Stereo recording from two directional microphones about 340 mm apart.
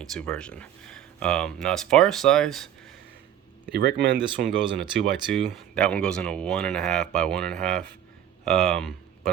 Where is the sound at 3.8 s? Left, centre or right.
Right.